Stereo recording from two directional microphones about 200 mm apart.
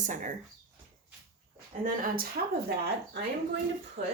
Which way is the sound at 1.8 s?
45° right (ahead or behind).